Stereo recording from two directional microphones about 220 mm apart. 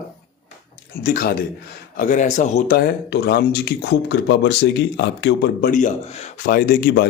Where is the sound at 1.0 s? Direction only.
40° left (ahead or behind).